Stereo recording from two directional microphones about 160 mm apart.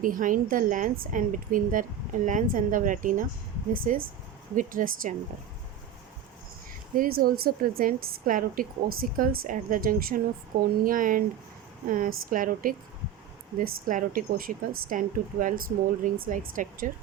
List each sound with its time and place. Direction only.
0.0 s a woman's voice: 55° right (ahead or behind)
6.9 s a woman's voice: 60° right (ahead or behind)